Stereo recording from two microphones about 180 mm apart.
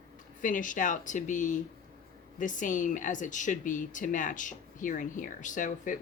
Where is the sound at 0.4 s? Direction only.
45° left (ahead or behind).